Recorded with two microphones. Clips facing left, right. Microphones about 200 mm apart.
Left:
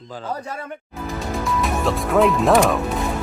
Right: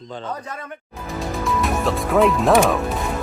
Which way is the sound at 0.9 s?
Centre (ahead or behind).